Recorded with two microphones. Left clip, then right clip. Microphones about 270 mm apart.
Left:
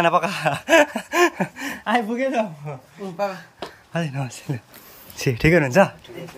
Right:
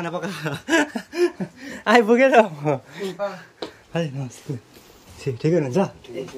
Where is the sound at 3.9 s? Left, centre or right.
Centre.